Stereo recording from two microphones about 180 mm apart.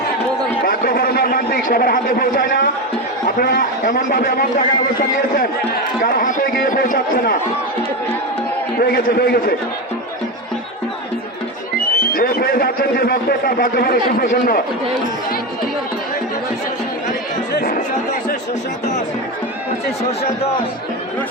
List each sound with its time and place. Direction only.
0.6 s a sound: 55° left (ahead or behind)
3.2 s a man's voice: 60° left (ahead or behind)
8.8 s speech: 60° left (ahead or behind)
12.1 s speech: 55° left (ahead or behind)
17.5 s chatter: 65° left (ahead or behind)